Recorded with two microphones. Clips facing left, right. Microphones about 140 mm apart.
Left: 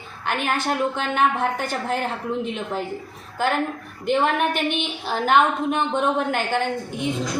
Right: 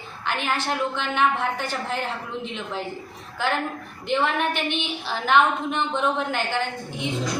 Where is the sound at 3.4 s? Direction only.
45° left (ahead or behind).